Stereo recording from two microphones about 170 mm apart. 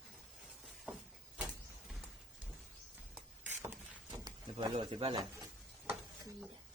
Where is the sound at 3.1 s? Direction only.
15° right (ahead or behind).